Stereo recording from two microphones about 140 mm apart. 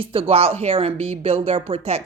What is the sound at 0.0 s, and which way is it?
A woman's voice, 40° right (ahead or behind).